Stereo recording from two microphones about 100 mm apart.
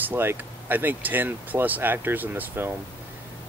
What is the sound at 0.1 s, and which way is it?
Speech, 20° right (ahead or behind).